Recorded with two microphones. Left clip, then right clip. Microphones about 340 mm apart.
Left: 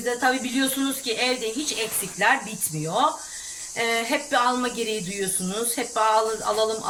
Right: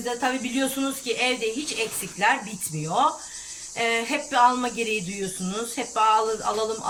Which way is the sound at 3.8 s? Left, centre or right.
Centre.